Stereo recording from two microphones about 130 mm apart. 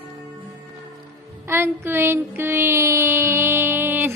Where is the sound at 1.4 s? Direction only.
20° right (ahead or behind).